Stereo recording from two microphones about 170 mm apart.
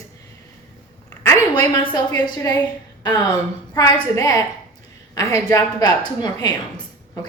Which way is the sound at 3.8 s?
20° left (ahead or behind).